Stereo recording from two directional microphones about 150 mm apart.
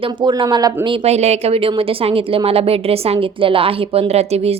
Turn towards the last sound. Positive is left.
turn(degrees=-45)  # may be behind; listen again after turning